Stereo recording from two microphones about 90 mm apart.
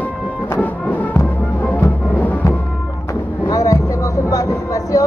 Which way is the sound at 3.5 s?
40° left (ahead or behind).